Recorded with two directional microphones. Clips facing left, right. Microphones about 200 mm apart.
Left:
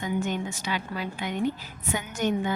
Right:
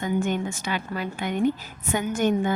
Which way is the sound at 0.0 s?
50° right (ahead or behind).